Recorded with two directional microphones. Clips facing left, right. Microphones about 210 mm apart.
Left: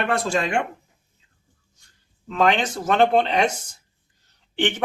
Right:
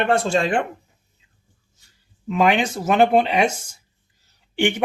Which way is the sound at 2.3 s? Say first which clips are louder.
Right 2 dB; 10° right (ahead or behind).